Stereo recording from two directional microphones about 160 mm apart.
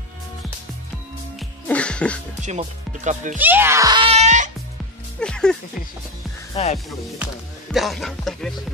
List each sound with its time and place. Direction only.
1.7 s music: 5° left (ahead or behind)
2.4 s speech: 50° right (ahead or behind)
3.3 s speech: 10° right (ahead or behind)
4.0 s music: 40° right (ahead or behind)
5.2 s speech: 5° left (ahead or behind)
6.5 s speech: 45° left (ahead or behind)
7.7 s speech: centre (ahead or behind)